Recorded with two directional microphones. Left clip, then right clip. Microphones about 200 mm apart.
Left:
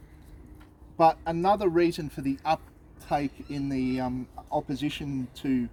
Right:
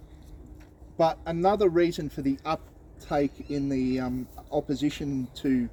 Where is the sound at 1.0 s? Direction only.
15° left (ahead or behind).